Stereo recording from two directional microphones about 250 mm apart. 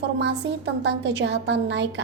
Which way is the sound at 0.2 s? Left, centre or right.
Right.